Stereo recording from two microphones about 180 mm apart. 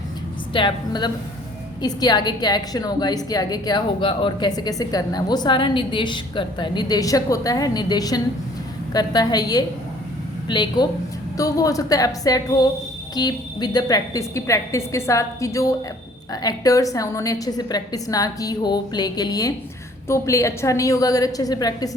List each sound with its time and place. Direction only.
0.5 s a woman's voice: 25° left (ahead or behind)